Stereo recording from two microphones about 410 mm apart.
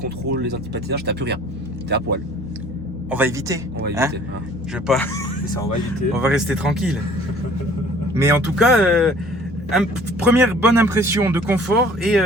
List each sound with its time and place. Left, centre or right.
0.0 s speech: right
3.1 s speech: centre
8.1 s speech: centre
10.2 s speech: centre